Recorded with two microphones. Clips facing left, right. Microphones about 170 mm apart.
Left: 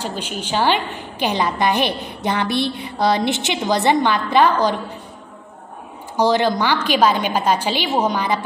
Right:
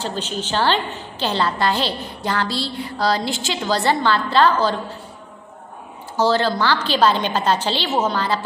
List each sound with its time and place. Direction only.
0.0 s a woman's voice: 10° left (ahead or behind)
6.1 s a woman's voice: 15° left (ahead or behind)